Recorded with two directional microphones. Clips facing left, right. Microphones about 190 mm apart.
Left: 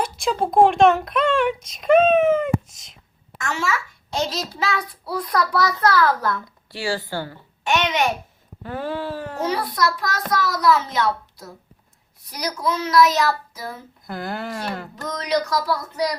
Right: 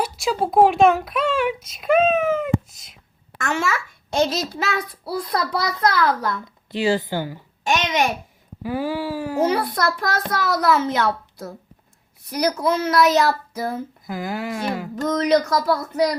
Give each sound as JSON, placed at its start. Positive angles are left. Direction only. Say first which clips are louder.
{"t": 0.0, "sound": "speech", "louder": "even", "side_deg": -5}
{"t": 3.3, "sound": "a child's voice", "louder": "right 2 dB", "side_deg": -55}
{"t": 5.1, "sound": "a child's voice", "louder": "left 2 dB", "side_deg": -25}
{"t": 8.6, "sound": "speech", "louder": "right 3 dB", "side_deg": -10}
{"t": 9.5, "sound": "speech", "louder": "right 1 dB", "side_deg": -55}
{"t": 14.1, "sound": "speech", "louder": "right 1 dB", "side_deg": -5}
{"t": 15.0, "sound": "speech", "louder": "right 5 dB", "side_deg": -50}